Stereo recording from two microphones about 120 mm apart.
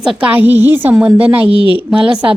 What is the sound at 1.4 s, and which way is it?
Speech, 50° right (ahead or behind).